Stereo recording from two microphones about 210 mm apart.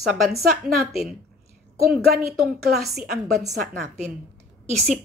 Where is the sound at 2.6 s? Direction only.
45° right (ahead or behind).